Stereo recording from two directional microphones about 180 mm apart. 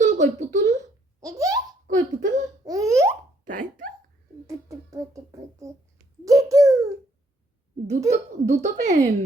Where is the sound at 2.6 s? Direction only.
20° right (ahead or behind).